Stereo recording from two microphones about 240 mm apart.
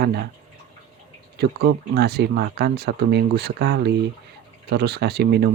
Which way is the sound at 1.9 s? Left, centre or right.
Right.